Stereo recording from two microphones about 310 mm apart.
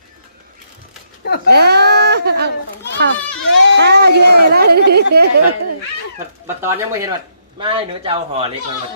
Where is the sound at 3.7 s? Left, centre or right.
Right.